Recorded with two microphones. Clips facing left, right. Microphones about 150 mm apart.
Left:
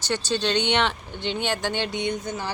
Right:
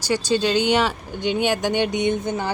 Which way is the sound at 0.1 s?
10° right (ahead or behind).